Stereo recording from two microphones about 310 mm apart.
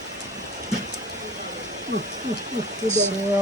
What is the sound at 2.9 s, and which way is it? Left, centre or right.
Speech, right.